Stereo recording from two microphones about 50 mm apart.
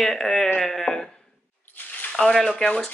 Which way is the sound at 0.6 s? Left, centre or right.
Centre.